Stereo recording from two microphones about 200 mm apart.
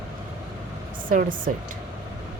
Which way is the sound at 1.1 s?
45° right (ahead or behind).